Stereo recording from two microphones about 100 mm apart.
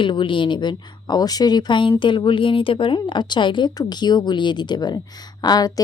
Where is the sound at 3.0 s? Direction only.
50° left (ahead or behind).